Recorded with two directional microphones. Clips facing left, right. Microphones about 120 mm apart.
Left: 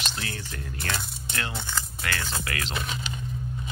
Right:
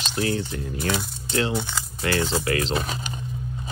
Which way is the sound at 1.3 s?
25° right (ahead or behind).